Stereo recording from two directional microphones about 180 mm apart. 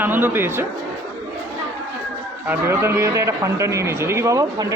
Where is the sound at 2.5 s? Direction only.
15° right (ahead or behind).